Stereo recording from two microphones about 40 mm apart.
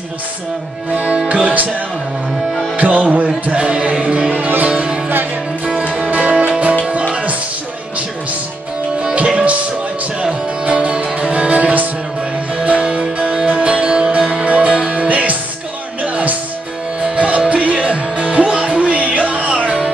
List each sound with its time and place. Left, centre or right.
0.9 s music: right
2.7 s music: right
3.5 s speech: right
4.0 s music: right
9.1 s music: right
10.6 s music: right
12.5 s music: right